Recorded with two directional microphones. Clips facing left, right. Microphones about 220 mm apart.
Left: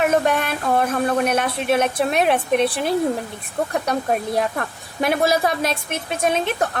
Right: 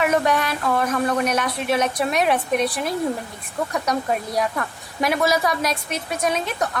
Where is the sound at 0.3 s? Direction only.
50° left (ahead or behind).